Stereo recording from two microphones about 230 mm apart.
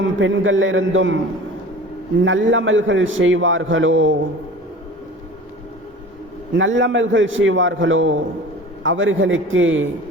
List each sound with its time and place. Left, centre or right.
0.0 s a man's voice: right
2.2 s a man's voice: right
6.6 s a man's voice: right